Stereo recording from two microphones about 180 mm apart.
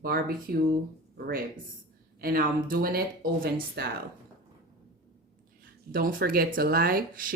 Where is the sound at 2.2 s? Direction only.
55° right (ahead or behind).